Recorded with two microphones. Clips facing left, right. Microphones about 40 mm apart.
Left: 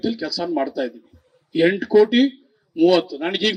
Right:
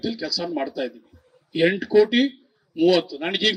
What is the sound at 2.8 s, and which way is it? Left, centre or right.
Speech, left.